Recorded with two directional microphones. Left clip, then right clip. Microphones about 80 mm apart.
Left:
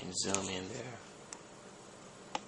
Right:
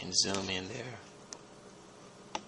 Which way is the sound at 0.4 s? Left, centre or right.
Right.